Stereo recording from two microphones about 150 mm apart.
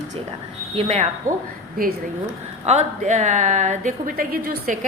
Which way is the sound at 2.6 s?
50° right (ahead or behind).